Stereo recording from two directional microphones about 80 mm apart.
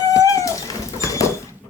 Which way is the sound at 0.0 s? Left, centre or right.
Left.